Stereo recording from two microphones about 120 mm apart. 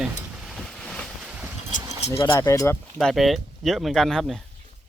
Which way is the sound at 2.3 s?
25° left (ahead or behind).